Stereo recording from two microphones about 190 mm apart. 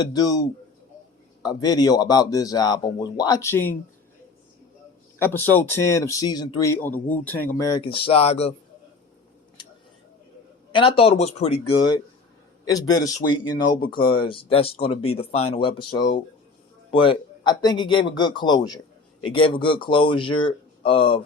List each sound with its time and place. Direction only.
0.0 s a man's voice: 20° left (ahead or behind)
1.4 s a man's voice: 20° left (ahead or behind)
5.2 s speech: 10° left (ahead or behind)
7.8 s speech: 30° left (ahead or behind)
10.7 s a man's voice: 25° left (ahead or behind)